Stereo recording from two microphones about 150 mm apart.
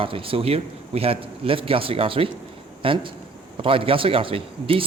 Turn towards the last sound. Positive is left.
turn(degrees=-40)  # may be behind; listen again after turning